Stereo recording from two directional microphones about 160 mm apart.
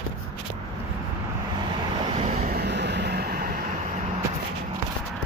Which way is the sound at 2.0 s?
40° right (ahead or behind).